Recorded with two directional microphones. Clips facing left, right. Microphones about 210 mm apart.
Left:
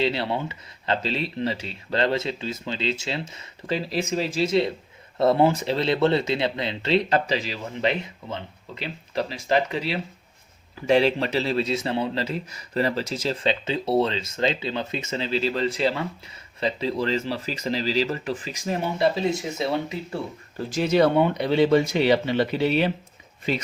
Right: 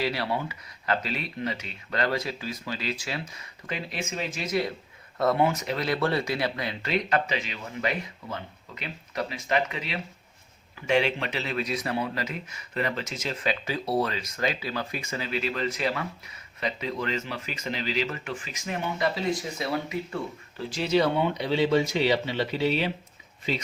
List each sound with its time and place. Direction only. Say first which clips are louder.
0.0 s a man's voice: left 4 dB; 25° left (ahead or behind)
20.6 s speech: left 4 dB; 45° left (ahead or behind)